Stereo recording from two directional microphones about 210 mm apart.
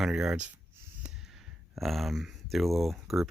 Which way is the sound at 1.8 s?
Centre (ahead or behind).